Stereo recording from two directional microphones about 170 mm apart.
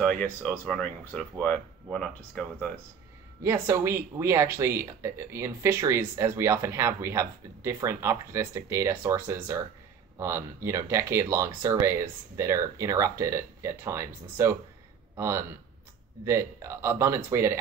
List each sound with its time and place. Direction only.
0.2 s speech: 5° left (ahead or behind)
3.4 s speech: 15° right (ahead or behind)